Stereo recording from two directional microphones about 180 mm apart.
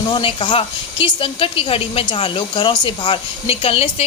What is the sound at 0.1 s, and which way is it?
Speech, 30° left (ahead or behind).